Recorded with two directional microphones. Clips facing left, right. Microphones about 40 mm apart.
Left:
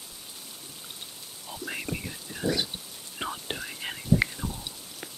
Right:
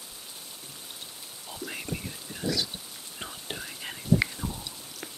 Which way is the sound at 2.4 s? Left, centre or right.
Left.